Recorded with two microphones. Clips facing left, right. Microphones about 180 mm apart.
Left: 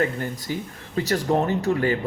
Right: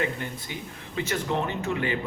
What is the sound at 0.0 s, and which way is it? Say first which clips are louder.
Speech: left 5 dB; 40° left (ahead or behind).